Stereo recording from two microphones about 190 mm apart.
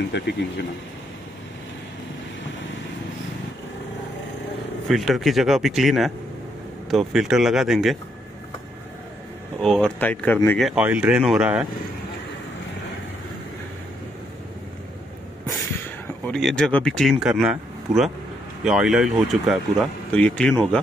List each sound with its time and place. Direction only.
0.1 s speech: 65° left (ahead or behind)
4.8 s speech: centre (ahead or behind)
9.6 s speech: 5° left (ahead or behind)
10.6 s speech: 5° right (ahead or behind)
16.3 s speech: 5° left (ahead or behind)